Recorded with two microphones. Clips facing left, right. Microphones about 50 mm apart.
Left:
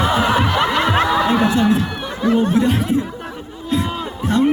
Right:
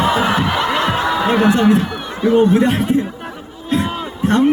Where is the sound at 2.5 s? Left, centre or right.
Right.